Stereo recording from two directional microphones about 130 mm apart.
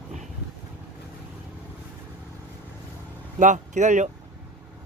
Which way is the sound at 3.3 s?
70° right (ahead or behind).